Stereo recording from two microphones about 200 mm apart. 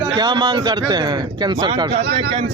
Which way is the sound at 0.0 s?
20° right (ahead or behind).